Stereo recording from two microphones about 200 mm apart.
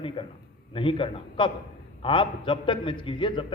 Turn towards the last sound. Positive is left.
turn(degrees=25)  # may be behind; listen again after turning